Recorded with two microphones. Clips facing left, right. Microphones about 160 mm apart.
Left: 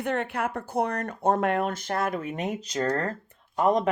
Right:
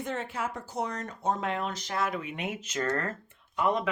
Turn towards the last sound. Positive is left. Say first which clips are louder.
# left 5 dB
turn(degrees=45)  # may be behind; listen again after turning